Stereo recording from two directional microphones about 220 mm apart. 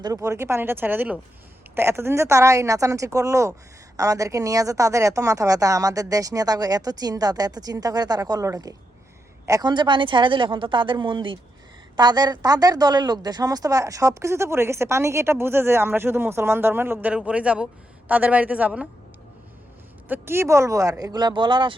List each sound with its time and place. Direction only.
0.0 s a woman's voice: 15° right (ahead or behind)
20.1 s a woman's voice: 10° right (ahead or behind)